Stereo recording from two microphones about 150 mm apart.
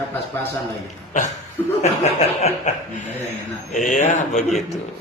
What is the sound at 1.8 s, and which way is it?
Speech, 50° left (ahead or behind).